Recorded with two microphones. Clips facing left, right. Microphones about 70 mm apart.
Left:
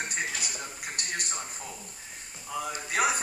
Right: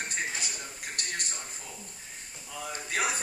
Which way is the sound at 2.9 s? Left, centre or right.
Centre.